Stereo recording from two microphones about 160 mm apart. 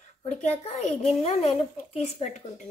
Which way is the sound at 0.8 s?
40° left (ahead or behind).